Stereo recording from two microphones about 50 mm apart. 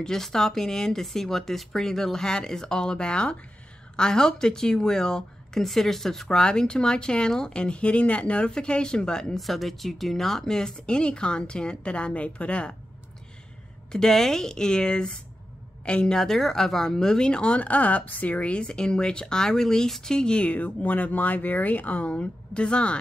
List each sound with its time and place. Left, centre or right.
0.0 s speech: centre
9.4 s speech: centre; by 12.7 s left
13.9 s speech: centre
16.2 s speech: centre
20.5 s speech: left